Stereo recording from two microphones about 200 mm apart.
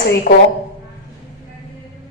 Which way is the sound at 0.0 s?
50° left (ahead or behind).